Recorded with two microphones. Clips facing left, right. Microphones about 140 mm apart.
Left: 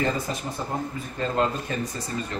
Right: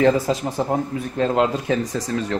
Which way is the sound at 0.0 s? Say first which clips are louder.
Right 9 dB; 90° right.